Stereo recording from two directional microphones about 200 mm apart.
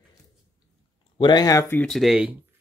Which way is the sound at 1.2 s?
20° left (ahead or behind).